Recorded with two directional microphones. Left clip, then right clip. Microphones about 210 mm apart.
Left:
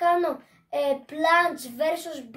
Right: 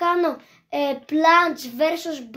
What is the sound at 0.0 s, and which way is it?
Child singing, 50° right (ahead or behind).